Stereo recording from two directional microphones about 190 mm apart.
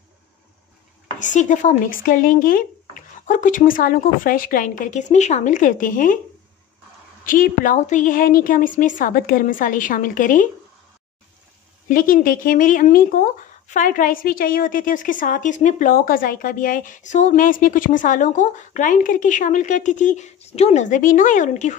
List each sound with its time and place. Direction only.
1.2 s speech: 40° left (ahead or behind)
7.2 s speech: 45° left (ahead or behind)
11.9 s speech: 45° left (ahead or behind)